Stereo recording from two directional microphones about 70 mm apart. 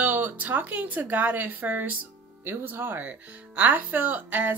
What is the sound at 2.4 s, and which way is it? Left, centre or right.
Speech, right.